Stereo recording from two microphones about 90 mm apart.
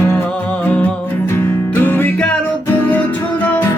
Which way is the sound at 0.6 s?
20° left (ahead or behind).